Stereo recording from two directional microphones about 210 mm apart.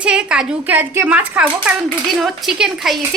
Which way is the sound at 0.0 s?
5° right (ahead or behind).